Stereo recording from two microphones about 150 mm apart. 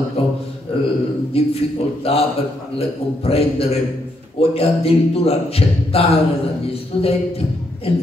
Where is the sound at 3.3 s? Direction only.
40° left (ahead or behind).